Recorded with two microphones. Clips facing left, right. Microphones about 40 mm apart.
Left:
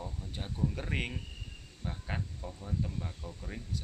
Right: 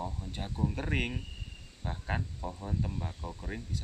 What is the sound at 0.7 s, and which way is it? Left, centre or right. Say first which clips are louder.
Speech: right 3 dB; centre.